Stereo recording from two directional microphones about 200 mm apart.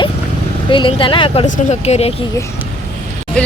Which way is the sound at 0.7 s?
25° left (ahead or behind).